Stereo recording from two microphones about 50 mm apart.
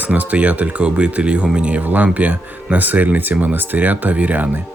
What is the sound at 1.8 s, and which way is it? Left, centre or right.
Speech, right.